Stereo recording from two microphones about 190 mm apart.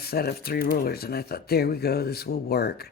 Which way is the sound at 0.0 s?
55° left (ahead or behind).